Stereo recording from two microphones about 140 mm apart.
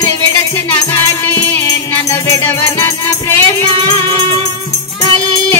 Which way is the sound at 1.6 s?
20° left (ahead or behind).